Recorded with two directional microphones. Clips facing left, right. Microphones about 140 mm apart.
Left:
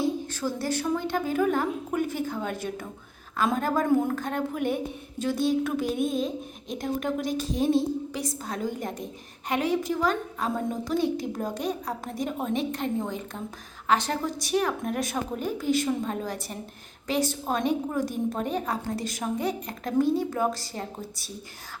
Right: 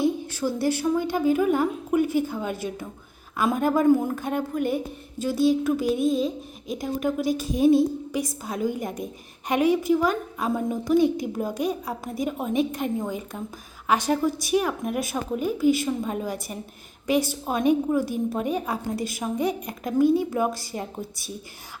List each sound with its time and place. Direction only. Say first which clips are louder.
0.0 s a woman's voice: right 3 dB; 10° right (ahead or behind)